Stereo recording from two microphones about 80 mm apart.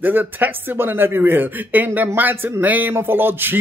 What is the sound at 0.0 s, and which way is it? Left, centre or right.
Speech, right.